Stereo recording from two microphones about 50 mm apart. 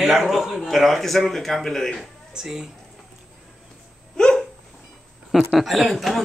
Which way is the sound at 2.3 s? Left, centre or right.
Centre.